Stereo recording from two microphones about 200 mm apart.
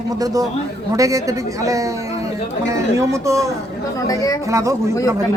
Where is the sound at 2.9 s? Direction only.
15° right (ahead or behind).